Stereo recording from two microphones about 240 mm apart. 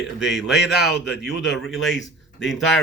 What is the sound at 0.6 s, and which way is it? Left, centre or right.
Speech, left.